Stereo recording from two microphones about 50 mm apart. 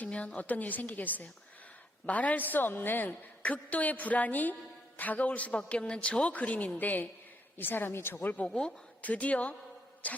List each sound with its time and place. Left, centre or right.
0.0 s a woman's voice: left